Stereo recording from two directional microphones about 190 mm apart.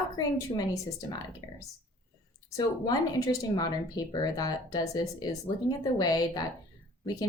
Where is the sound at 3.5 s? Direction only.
20° left (ahead or behind).